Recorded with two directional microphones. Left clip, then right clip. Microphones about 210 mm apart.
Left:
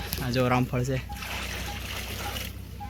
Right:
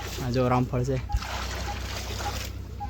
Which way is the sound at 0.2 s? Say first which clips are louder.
Even; 5° right (ahead or behind).